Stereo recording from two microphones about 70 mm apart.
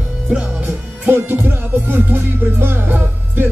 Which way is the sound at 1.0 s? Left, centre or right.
Right.